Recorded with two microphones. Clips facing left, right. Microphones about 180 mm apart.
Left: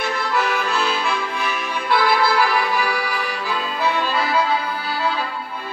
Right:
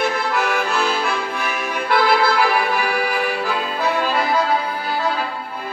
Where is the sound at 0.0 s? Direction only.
55° right (ahead or behind).